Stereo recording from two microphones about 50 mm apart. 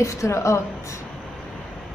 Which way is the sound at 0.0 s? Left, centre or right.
Left.